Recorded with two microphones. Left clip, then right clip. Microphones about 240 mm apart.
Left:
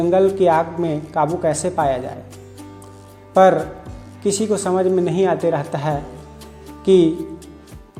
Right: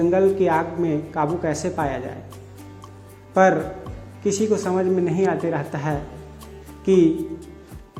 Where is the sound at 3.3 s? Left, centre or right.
Left.